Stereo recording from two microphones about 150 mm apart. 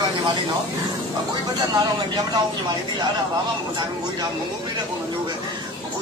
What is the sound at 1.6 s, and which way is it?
Speech, 25° right (ahead or behind).